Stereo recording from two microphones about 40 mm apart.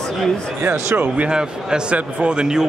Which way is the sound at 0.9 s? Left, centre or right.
Right.